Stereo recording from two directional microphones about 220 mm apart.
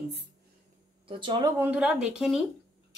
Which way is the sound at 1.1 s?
20° right (ahead or behind).